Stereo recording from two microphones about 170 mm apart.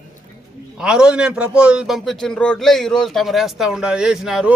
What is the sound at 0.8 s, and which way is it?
A man's voice, 5° right (ahead or behind).